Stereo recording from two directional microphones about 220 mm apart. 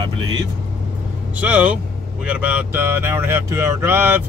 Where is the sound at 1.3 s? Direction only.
5° right (ahead or behind).